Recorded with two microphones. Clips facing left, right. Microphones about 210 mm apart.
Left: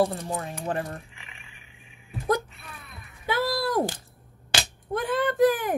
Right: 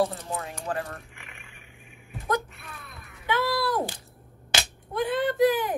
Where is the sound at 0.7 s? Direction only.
30° left (ahead or behind).